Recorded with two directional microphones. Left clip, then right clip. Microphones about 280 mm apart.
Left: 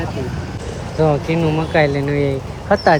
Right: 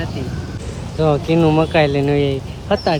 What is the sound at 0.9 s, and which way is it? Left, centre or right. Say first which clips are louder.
Speech: right 1 dB; centre.